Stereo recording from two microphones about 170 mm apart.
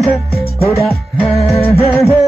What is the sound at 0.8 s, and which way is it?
Music, centre (ahead or behind).